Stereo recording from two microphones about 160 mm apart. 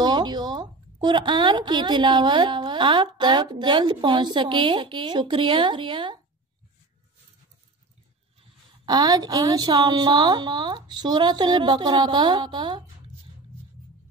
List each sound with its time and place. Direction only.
0.0 s a woman's voice: 25° right (ahead or behind)
8.8 s a woman's voice: 25° right (ahead or behind)